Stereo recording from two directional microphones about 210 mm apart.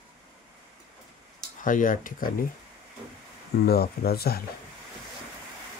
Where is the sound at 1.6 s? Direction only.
40° left (ahead or behind).